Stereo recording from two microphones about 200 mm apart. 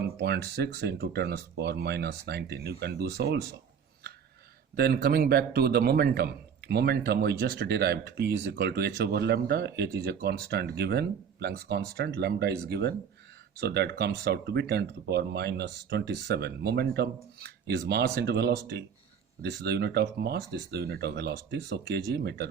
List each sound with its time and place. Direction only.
0.2 s speech: 55° right (ahead or behind)
4.8 s a man's voice: 50° right (ahead or behind)